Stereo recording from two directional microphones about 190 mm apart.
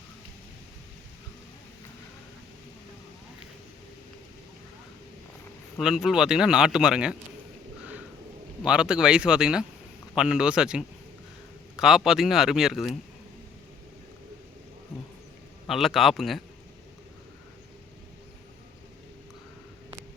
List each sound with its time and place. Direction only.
5.8 s a man's voice: centre (ahead or behind)
8.6 s a man's voice: 5° right (ahead or behind)
15.6 s a man's voice: centre (ahead or behind)